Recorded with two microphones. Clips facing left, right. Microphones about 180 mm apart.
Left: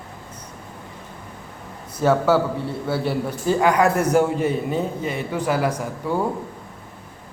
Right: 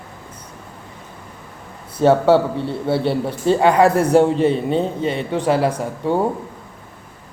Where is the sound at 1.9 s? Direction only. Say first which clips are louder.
Right 5 dB; 30° right (ahead or behind).